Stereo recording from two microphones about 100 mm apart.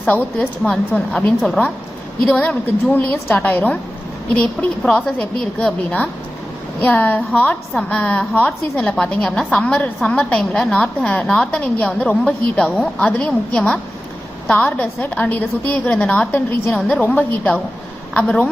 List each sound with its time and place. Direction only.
0.0 s a woman's voice: 15° left (ahead or behind)
4.8 s a woman's voice: 5° left (ahead or behind)